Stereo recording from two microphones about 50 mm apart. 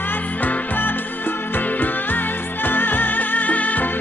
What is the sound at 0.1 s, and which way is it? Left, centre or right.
Music, left.